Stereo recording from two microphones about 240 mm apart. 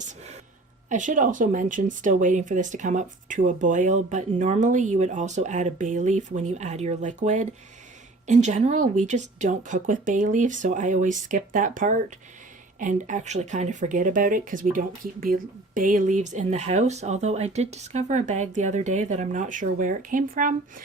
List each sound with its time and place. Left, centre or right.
0.9 s speech: right